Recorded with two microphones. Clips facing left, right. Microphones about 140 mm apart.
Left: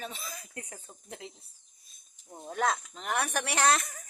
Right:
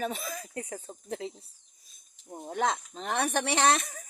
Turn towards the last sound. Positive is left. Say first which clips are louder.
# right 2 dB
turn(degrees=-20)  # may be behind; listen again after turning